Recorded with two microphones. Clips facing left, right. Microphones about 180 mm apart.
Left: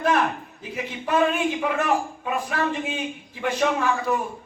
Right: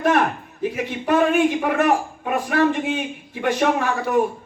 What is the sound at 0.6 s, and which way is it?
A man's voice, 65° right (ahead or behind).